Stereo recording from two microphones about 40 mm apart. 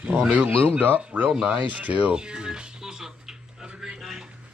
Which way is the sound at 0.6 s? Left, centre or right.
Right.